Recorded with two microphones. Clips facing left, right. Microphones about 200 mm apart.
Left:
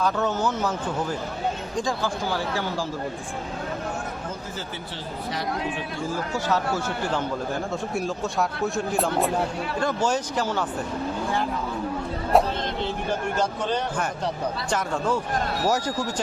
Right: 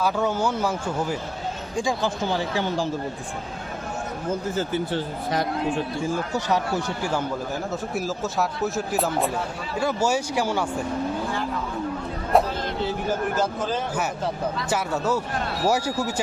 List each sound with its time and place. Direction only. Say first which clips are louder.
0.0 s speech: right 1 dB; 10° right (ahead or behind)
5.3 s speech: right 4 dB; 45° right (ahead or behind)
6.3 s speech: left 2 dB; 15° right (ahead or behind)
7.9 s speech: even; centre (ahead or behind)
12.3 s a man's voice: even; 5° right (ahead or behind)